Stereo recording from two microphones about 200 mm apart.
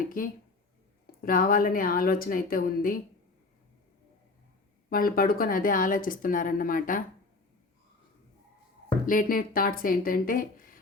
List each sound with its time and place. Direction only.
0.2 s a woman's voice: 45° left (ahead or behind)
4.9 s a woman's voice: 45° left (ahead or behind)
9.0 s a woman's voice: 45° left (ahead or behind)